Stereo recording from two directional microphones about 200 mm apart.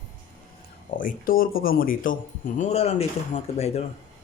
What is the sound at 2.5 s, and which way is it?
Speech, 30° left (ahead or behind).